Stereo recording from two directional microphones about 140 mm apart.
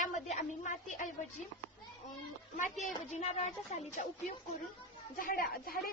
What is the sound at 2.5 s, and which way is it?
A woman's voice, 65° left (ahead or behind).